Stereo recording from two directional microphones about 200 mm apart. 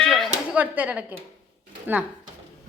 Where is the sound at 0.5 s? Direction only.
10° right (ahead or behind).